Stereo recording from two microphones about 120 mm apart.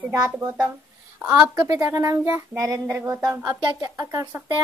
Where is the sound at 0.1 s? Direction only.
30° right (ahead or behind).